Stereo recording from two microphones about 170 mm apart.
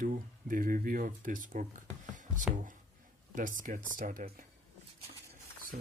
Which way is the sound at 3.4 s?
50° right (ahead or behind).